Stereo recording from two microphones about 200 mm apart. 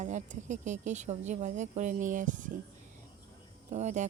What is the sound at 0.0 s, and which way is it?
Speech, 35° right (ahead or behind).